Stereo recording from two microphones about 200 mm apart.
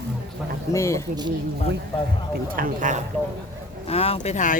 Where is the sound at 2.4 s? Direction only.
45° right (ahead or behind).